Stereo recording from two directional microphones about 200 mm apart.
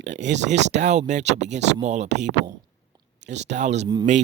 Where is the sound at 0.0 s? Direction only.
35° right (ahead or behind).